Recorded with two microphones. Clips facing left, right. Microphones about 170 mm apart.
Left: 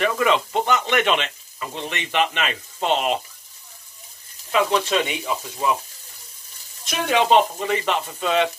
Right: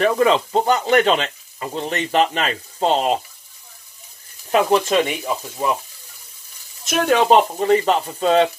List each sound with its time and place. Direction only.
0.0 s speech: 35° right (ahead or behind)
4.5 s speech: 45° right (ahead or behind)
6.8 s speech: 45° right (ahead or behind)